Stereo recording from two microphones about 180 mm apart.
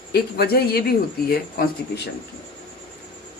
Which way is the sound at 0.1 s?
60° left (ahead or behind).